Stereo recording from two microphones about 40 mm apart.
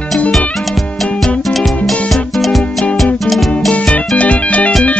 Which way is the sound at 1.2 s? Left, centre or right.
Centre.